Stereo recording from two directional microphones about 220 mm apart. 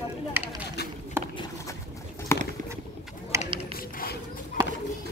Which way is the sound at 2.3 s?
10° left (ahead or behind).